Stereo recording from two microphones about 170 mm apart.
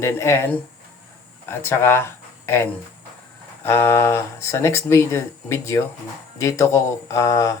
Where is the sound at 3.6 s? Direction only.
15° left (ahead or behind).